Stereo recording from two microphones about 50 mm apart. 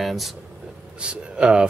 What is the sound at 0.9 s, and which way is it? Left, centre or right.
Speech, centre.